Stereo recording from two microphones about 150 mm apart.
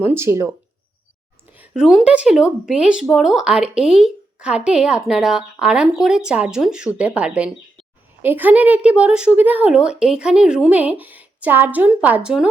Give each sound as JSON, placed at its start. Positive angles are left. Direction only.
{"t": 0.0, "sound": "speech", "side_deg": -15}
{"t": 1.5, "sound": "speech", "side_deg": -10}